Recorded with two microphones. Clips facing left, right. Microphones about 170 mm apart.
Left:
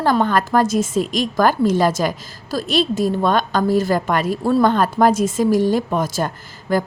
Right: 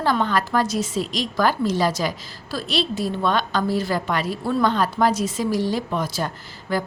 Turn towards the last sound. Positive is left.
turn(degrees=45)  # may be behind; listen again after turning